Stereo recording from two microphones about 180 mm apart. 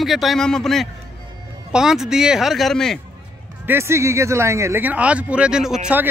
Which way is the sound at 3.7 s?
15° right (ahead or behind).